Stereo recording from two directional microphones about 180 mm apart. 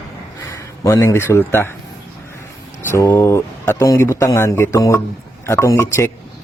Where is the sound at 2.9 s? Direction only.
15° left (ahead or behind).